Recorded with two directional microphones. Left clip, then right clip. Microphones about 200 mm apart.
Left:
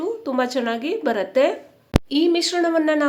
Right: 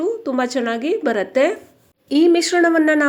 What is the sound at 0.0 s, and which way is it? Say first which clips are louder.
Speech: right 2 dB; 10° right (ahead or behind).